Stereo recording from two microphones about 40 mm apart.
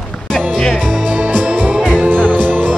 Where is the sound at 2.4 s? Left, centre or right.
Right.